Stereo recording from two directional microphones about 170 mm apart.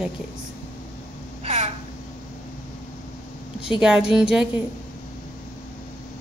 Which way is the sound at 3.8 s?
5° right (ahead or behind).